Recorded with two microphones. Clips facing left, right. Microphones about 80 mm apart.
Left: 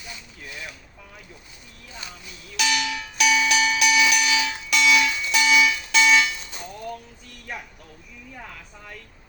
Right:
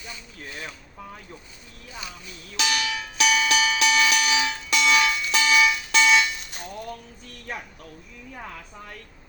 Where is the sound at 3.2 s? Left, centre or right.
Right.